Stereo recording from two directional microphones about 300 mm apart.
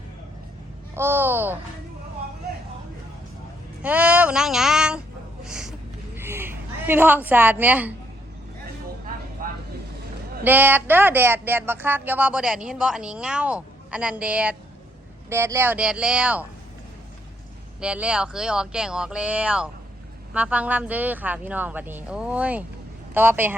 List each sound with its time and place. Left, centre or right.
0.9 s speech: centre
3.8 s a sound: centre
9.4 s vehicle: right
10.4 s speech: centre
17.7 s speech: centre